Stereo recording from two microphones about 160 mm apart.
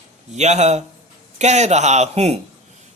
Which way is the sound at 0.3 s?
45° right (ahead or behind).